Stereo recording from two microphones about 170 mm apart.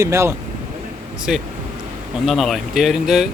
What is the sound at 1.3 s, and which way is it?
Speech, centre (ahead or behind).